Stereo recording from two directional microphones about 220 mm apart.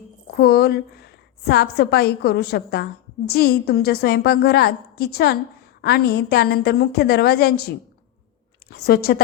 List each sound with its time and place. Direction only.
0.3 s a woman's voice: 45° left (ahead or behind)
8.7 s a woman's voice: 45° left (ahead or behind)